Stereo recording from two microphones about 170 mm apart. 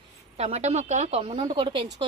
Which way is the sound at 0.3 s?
40° right (ahead or behind).